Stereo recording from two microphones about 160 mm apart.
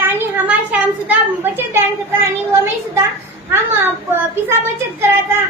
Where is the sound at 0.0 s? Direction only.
10° right (ahead or behind).